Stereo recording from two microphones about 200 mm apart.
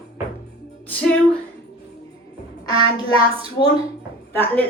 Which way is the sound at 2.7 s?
25° right (ahead or behind).